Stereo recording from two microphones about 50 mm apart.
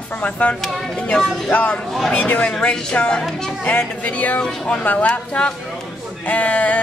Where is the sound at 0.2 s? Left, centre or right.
Left.